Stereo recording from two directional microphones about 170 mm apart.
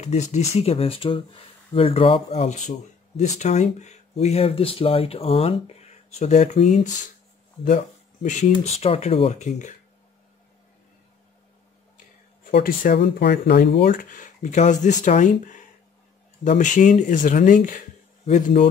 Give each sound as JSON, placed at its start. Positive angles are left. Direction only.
{"t": 0.0, "sound": "speech", "side_deg": 40}
{"t": 12.4, "sound": "speech", "side_deg": 60}